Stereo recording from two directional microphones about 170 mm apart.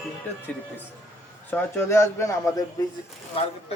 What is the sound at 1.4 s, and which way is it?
A man's voice, 10° left (ahead or behind).